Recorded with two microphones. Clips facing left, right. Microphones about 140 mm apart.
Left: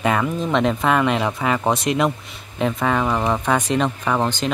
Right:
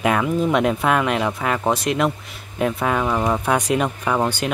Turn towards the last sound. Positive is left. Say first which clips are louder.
# even
turn(degrees=-10)  # may be behind; listen again after turning